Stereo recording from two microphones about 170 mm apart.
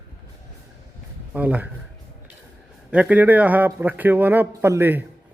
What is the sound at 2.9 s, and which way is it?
A man's voice, 5° right (ahead or behind).